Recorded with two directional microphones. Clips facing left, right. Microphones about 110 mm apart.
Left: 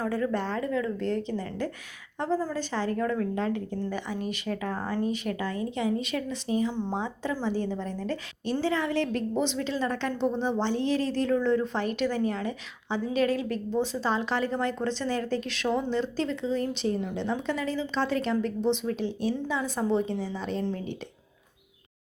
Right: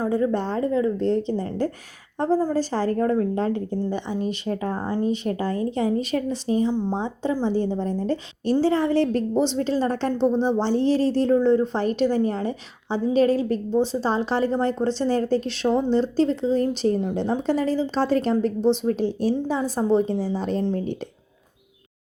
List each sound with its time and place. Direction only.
0.0 s a woman's voice: 25° right (ahead or behind); by 21.0 s 40° right (ahead or behind)